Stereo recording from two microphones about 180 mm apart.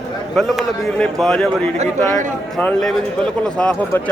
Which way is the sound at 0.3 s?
Centre (ahead or behind).